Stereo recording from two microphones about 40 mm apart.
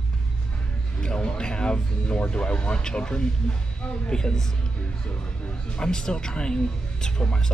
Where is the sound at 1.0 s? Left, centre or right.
Left.